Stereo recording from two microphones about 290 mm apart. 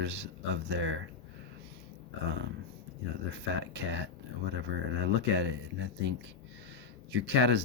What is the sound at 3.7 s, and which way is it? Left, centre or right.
Speech, right.